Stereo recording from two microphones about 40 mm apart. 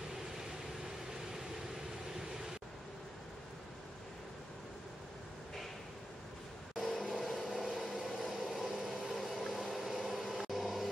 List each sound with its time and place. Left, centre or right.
6.8 s vehicle: centre
7.9 s a sound: centre
9.1 s vehicle: centre